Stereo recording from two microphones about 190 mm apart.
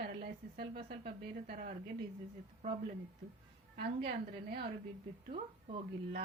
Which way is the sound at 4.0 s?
55° right (ahead or behind).